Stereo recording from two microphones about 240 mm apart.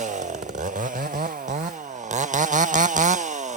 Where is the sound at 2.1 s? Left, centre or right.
Right.